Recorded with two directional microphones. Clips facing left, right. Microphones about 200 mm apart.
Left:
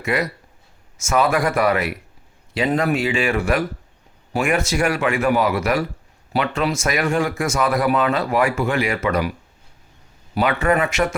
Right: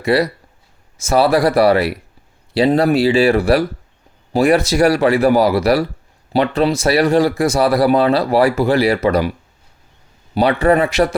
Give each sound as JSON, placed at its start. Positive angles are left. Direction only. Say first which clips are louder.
{"t": 0.0, "sound": "speech", "louder": "right 7 dB", "side_deg": -35}
{"t": 10.3, "sound": "speech", "louder": "right 5 dB", "side_deg": -35}